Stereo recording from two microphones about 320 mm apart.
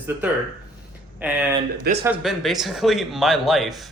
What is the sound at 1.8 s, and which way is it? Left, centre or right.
Speech, right.